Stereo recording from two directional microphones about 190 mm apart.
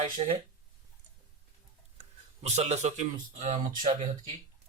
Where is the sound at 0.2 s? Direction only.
30° right (ahead or behind).